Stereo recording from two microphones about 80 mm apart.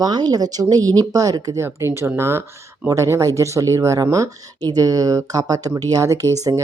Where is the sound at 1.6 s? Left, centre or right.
Right.